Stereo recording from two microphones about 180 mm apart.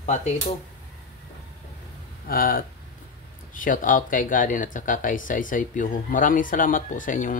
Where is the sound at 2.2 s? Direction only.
55° left (ahead or behind).